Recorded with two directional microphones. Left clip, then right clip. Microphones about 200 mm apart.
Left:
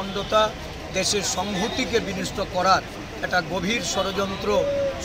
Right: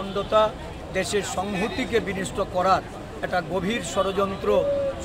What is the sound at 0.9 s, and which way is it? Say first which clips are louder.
Speech: left 1 dB; 30° right (ahead or behind).